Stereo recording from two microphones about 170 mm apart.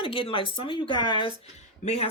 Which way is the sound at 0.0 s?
30° left (ahead or behind).